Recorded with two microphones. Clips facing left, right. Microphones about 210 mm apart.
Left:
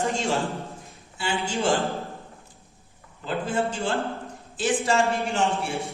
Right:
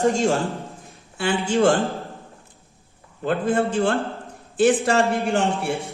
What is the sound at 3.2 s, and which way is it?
Speech, 55° right (ahead or behind).